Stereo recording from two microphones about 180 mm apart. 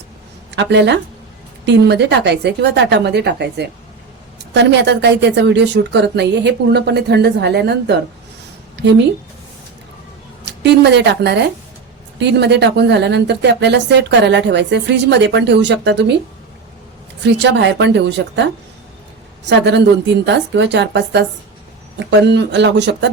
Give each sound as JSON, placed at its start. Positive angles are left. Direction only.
{"t": 0.5, "sound": "speech", "side_deg": -75}
{"t": 8.7, "sound": "a sound", "side_deg": -75}
{"t": 10.4, "sound": "a woman's voice", "side_deg": -70}
{"t": 17.2, "sound": "speech", "side_deg": -75}
{"t": 19.5, "sound": "speech", "side_deg": -70}